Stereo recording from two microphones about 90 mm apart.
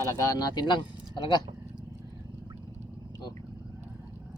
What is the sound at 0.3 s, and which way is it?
Speech, 50° left (ahead or behind).